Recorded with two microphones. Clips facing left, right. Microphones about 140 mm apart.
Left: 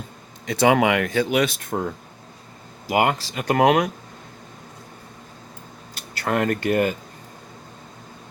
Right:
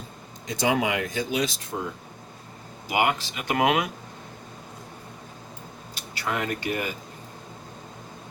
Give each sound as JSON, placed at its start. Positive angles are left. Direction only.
{"t": 0.4, "sound": "speech", "side_deg": 65}
{"t": 2.8, "sound": "speech", "side_deg": 35}
{"t": 6.1, "sound": "speech", "side_deg": 50}